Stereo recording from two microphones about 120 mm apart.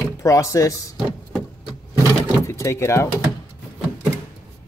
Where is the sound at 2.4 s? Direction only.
25° left (ahead or behind).